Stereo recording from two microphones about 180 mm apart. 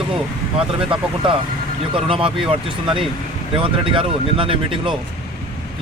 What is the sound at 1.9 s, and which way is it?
Speech, 30° right (ahead or behind).